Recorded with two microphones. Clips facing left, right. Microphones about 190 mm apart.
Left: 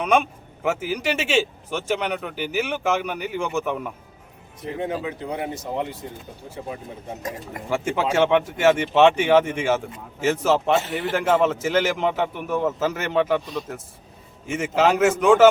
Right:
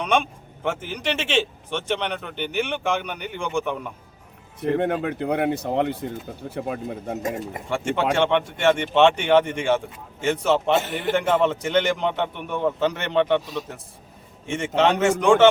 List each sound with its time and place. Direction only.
0.0 s speech: 5° left (ahead or behind)
4.6 s speech: 65° right (ahead or behind)
7.2 s speech: 25° right (ahead or behind)
7.7 s speech: 5° left (ahead or behind)